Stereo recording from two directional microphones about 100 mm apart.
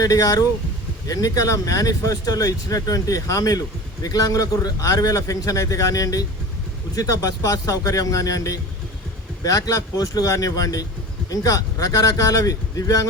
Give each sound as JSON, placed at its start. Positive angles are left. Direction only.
{"t": 0.0, "sound": "speech", "side_deg": 35}